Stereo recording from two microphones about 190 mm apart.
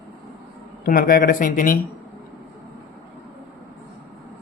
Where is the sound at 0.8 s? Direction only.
50° left (ahead or behind).